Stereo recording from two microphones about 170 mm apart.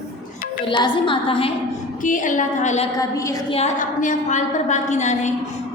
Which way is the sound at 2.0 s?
50° left (ahead or behind).